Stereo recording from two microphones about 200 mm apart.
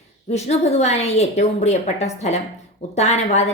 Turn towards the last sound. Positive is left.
turn(degrees=35)  # may be behind; listen again after turning